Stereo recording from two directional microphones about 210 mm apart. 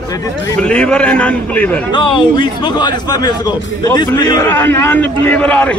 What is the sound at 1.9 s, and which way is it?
A man's voice, 20° left (ahead or behind).